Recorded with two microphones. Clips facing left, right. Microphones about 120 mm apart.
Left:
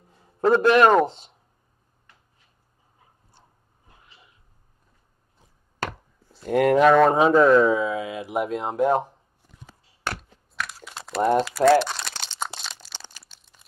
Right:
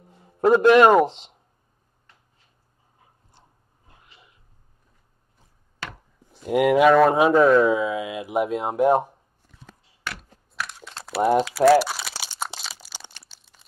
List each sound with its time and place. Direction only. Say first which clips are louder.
0.1 s a man's voice: right 2 dB; 15° right (ahead or behind)
6.2 s speech: even; 15° right (ahead or behind)
8.3 s speech: right 3 dB; 15° right (ahead or behind)
9.4 s a sound: even; 15° left (ahead or behind)
10.5 s typing: even; centre (ahead or behind)
13.3 s a sound: right 1 dB; 10° right (ahead or behind)